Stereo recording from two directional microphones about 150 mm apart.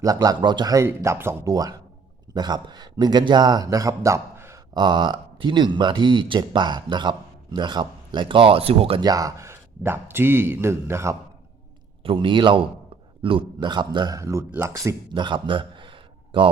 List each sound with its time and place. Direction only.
0.0 s speech: 25° right (ahead or behind)
4.7 s speech: 30° right (ahead or behind)
9.0 s a man's voice: 25° right (ahead or behind)
12.0 s speech: 35° right (ahead or behind)